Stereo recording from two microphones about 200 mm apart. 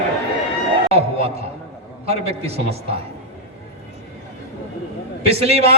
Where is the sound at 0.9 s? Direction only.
30° right (ahead or behind).